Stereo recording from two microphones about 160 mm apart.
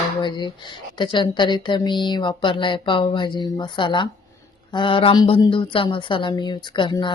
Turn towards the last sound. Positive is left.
turn(degrees=30)  # may be behind; listen again after turning